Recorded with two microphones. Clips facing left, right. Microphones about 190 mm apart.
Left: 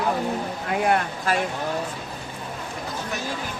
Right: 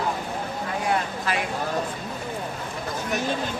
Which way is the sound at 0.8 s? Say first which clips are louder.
Left 3 dB; 55° left (ahead or behind).